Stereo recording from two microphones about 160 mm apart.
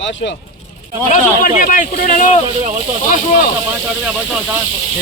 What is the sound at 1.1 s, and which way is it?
Speech, 55° left (ahead or behind).